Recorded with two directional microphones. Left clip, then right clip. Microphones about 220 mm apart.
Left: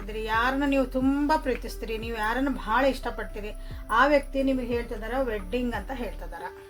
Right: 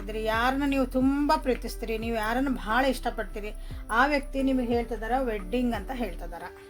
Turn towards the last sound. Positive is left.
turn(degrees=-50)  # may be behind; listen again after turning